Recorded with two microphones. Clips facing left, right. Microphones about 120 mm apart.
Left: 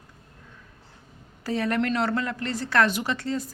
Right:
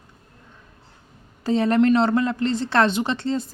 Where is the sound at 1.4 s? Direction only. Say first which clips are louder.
Right 7 dB; 25° right (ahead or behind).